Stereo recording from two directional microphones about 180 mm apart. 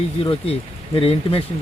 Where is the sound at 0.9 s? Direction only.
30° left (ahead or behind).